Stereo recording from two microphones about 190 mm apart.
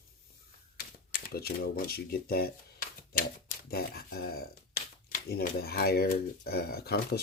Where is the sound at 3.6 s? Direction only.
55° left (ahead or behind).